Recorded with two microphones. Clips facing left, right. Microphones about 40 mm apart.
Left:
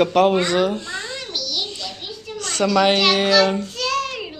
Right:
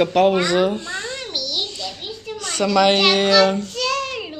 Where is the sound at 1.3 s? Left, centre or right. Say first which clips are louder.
Even; centre.